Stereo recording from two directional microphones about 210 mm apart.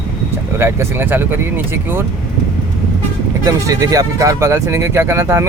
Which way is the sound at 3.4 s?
15° right (ahead or behind).